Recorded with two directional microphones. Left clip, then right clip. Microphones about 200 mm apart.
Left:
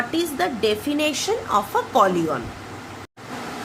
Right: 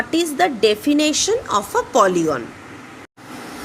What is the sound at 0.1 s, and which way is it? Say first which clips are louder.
Speech: right 5 dB; 40° right (ahead or behind).